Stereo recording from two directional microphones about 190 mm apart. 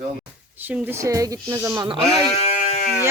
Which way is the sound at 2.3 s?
35° left (ahead or behind).